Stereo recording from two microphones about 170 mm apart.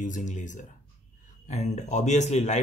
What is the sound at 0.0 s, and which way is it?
Speech, 45° left (ahead or behind).